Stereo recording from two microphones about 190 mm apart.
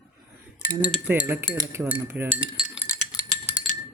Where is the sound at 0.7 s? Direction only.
5° left (ahead or behind).